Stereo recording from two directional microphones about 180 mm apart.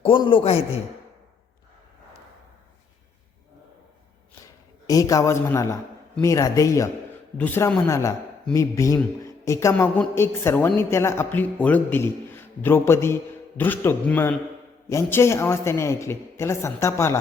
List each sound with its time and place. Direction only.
0.0 s a man's voice: 30° left (ahead or behind)
4.9 s a man's voice: 20° left (ahead or behind)